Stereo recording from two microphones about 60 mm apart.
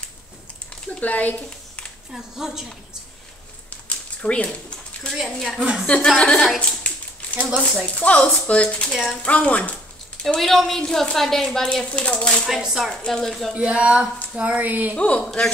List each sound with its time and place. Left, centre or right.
1.0 s speech: left
2.1 s a woman's voice: centre
4.2 s a sound: centre
5.2 s a woman's voice: centre
5.6 s a woman's voice: centre
6.0 s a woman's voice: centre
6.8 s a sound: left
7.8 s speech: left
10.2 s a woman's voice: centre
12.4 s a woman's voice: centre
13.1 s a woman's voice: centre
13.6 s speech: centre
15.0 s speech: centre